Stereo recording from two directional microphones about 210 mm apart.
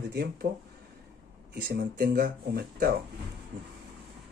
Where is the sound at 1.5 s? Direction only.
45° right (ahead or behind).